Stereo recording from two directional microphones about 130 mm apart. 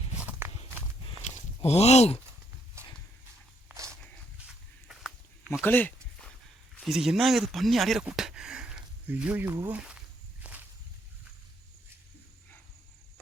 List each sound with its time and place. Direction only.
0.2 s walk: 15° right (ahead or behind)
1.6 s speech: 55° left (ahead or behind)
3.7 s walk: 15° right (ahead or behind)
4.4 s a sound: centre (ahead or behind)
5.6 s a sound: 15° left (ahead or behind)
6.7 s speech: centre (ahead or behind)
10.4 s walk: 15° right (ahead or behind)